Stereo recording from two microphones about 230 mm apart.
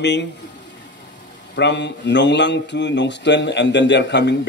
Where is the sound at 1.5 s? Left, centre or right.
Left.